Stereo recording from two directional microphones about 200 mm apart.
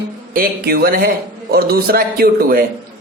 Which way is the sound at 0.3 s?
50° right (ahead or behind).